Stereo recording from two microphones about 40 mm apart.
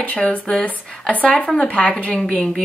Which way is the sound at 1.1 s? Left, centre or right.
Left.